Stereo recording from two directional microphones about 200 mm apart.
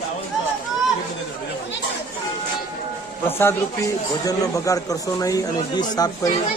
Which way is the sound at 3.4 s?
15° left (ahead or behind).